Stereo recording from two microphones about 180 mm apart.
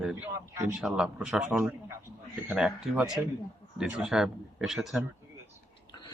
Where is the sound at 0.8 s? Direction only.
Centre (ahead or behind).